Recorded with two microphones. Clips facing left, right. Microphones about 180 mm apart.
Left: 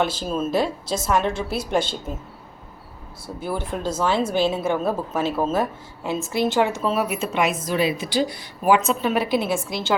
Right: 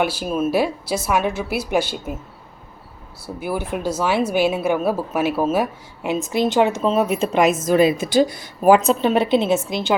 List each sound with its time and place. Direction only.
0.0 s a woman's voice: 10° right (ahead or behind)
3.2 s a woman's voice: 10° right (ahead or behind); by 7.3 s 25° right (ahead or behind)
7.3 s a woman's voice: 40° right (ahead or behind); by 9.9 s 20° right (ahead or behind)